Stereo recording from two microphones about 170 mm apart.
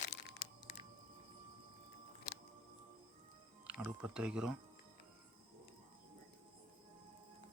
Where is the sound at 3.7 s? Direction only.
5° right (ahead or behind).